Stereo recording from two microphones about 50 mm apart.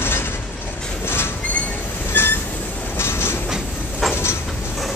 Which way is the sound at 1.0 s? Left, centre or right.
Left.